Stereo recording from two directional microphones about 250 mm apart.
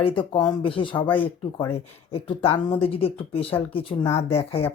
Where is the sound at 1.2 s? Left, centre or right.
Centre.